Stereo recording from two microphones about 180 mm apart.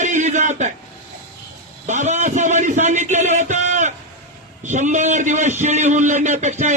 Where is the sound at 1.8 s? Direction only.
40° right (ahead or behind).